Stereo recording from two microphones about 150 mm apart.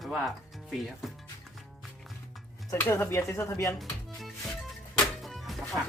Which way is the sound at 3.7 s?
Centre (ahead or behind).